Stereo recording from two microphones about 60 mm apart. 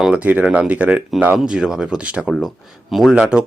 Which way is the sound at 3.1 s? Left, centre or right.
Centre.